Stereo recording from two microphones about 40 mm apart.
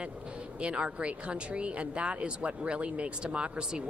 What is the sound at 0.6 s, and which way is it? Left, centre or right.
Speech, right.